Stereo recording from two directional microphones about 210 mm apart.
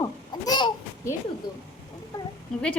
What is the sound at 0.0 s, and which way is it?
Babbling, 20° left (ahead or behind).